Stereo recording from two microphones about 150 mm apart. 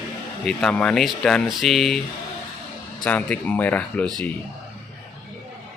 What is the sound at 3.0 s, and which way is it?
Speech, 10° left (ahead or behind).